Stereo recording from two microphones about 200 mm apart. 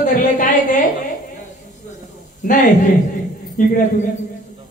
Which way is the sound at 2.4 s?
40° left (ahead or behind).